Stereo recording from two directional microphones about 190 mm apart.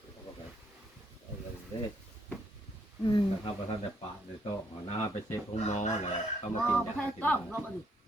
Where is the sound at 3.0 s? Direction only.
25° left (ahead or behind).